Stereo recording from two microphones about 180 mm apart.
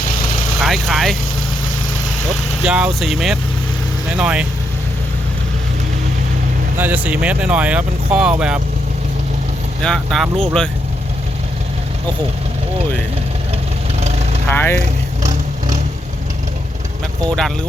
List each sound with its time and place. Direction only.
0.6 s speech: centre (ahead or behind)
2.6 s speech: 5° right (ahead or behind)
6.7 s speech: 10° right (ahead or behind)
9.8 s speech: 5° left (ahead or behind)
14.4 s speech: 10° left (ahead or behind)
14.8 s vehicle: 45° right (ahead or behind)